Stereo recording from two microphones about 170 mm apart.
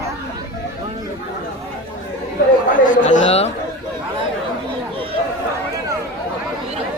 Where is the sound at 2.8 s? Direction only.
50° left (ahead or behind).